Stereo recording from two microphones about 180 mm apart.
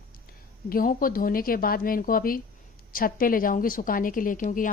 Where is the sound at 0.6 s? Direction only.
50° left (ahead or behind).